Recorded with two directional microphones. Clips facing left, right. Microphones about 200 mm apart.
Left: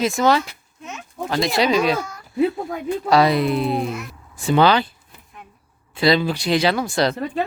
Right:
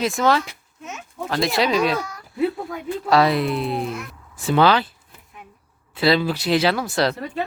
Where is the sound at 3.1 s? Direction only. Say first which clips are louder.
Left 1 dB; centre (ahead or behind).